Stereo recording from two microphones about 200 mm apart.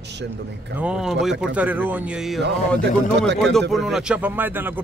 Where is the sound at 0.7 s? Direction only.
5° right (ahead or behind).